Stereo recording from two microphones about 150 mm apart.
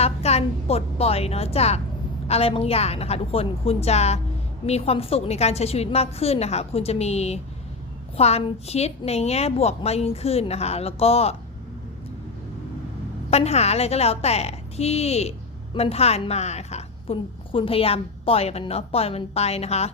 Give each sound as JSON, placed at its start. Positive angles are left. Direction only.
{"t": 0.0, "sound": "a woman's voice", "side_deg": 45}
{"t": 13.3, "sound": "a woman's voice", "side_deg": 45}